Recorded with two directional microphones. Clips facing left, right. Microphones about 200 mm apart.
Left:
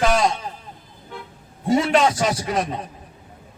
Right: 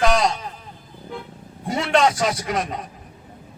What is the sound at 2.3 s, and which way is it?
Speech, 30° left (ahead or behind).